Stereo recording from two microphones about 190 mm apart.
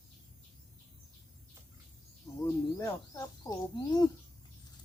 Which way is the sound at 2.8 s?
20° left (ahead or behind).